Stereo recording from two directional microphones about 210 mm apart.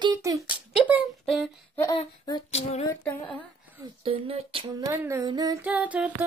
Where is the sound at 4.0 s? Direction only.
25° right (ahead or behind).